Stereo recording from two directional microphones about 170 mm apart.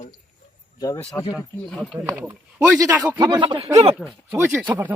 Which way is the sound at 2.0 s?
20° right (ahead or behind).